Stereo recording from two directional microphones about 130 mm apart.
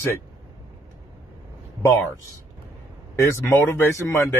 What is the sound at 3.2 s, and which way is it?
Speech, 20° left (ahead or behind).